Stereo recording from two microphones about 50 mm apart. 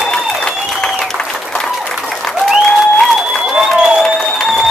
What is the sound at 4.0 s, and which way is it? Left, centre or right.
Music, centre.